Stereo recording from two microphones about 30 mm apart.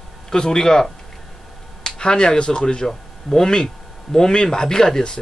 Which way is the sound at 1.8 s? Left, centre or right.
Left.